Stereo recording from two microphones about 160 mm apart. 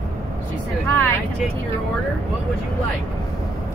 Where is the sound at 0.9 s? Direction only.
10° left (ahead or behind).